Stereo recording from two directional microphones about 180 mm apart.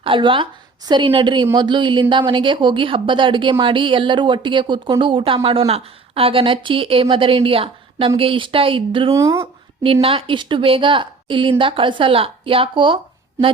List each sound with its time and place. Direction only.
0.0 s a woman's voice: 30° right (ahead or behind)
9.8 s a woman's voice: 30° right (ahead or behind)